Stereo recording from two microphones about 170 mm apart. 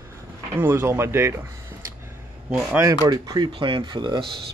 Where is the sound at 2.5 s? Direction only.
5° right (ahead or behind).